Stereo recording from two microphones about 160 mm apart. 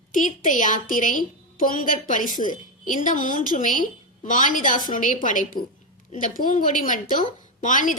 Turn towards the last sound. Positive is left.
turn(degrees=55)  # may be behind; listen again after turning